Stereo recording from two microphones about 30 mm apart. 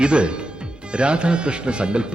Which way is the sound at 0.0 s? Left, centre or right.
Right.